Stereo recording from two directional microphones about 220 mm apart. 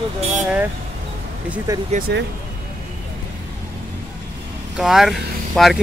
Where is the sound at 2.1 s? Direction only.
50° right (ahead or behind).